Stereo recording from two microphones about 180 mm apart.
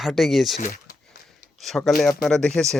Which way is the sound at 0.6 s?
45° left (ahead or behind).